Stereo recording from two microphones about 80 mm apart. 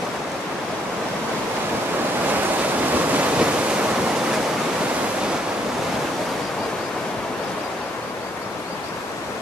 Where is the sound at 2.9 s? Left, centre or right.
Centre.